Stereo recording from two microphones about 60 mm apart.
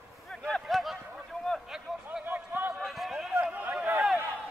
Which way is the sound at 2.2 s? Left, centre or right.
Right.